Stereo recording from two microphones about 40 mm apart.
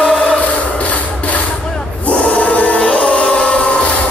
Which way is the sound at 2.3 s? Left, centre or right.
Left.